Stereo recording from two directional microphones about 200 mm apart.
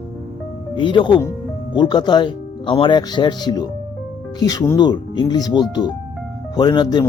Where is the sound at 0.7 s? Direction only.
25° left (ahead or behind).